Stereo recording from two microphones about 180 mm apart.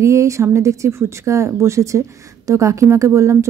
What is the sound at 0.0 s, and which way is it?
Speech, 15° right (ahead or behind).